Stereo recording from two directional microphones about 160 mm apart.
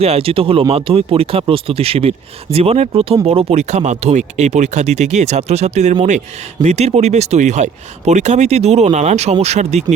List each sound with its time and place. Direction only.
0.0 s speech: 35° right (ahead or behind)